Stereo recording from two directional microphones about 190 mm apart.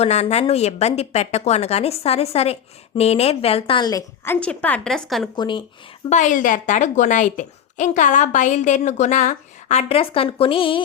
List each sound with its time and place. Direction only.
0.0 s a woman's voice: 35° left (ahead or behind); by 4.4 s 20° left (ahead or behind)
4.4 s a woman's voice: 5° left (ahead or behind)
5.4 s speech: 25° left (ahead or behind)
6.1 s a woman's voice: 40° left (ahead or behind)